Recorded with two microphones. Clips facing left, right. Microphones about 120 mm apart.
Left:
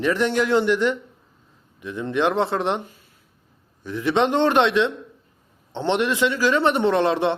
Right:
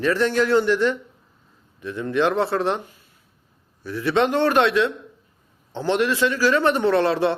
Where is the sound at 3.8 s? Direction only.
20° left (ahead or behind).